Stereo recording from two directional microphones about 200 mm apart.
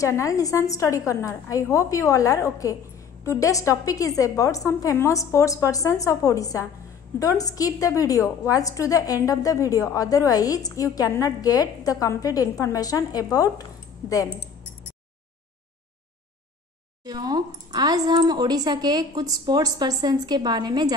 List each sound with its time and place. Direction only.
0.0 s a woman's voice: 15° left (ahead or behind)
17.0 s speech: 20° right (ahead or behind)